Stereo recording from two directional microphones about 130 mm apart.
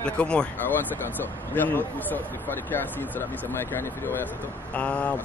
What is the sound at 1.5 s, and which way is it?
Speech, 15° left (ahead or behind).